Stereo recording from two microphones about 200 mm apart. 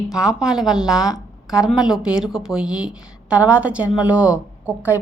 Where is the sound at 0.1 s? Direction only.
5° right (ahead or behind).